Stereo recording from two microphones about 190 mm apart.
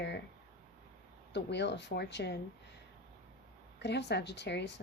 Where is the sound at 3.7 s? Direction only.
65° left (ahead or behind).